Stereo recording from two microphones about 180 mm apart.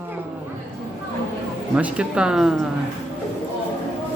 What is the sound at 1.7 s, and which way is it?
Speech, 5° right (ahead or behind).